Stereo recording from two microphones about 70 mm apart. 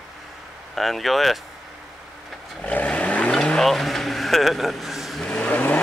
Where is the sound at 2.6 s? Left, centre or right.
Centre.